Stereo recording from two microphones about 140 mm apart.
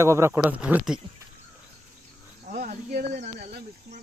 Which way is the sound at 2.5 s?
70° right (ahead or behind).